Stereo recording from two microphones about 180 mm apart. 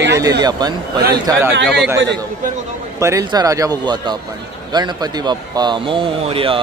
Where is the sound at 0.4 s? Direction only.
20° right (ahead or behind).